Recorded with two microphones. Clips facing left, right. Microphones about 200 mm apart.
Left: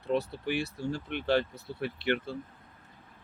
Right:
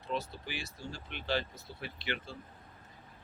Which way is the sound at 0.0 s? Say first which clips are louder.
Left 8 dB; 60° left (ahead or behind).